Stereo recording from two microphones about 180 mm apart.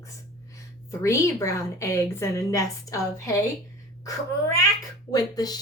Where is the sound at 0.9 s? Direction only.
15° left (ahead or behind).